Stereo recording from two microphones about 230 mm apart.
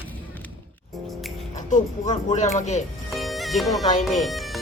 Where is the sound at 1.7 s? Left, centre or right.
Left.